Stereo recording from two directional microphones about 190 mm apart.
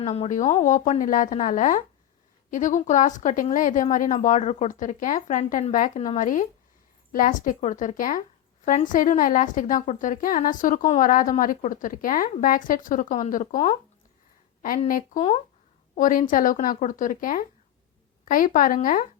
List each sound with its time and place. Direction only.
0.0 s a woman's voice: 35° left (ahead or behind)
14.8 s a woman's voice: 45° left (ahead or behind)